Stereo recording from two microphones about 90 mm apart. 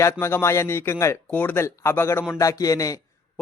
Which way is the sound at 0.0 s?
30° left (ahead or behind).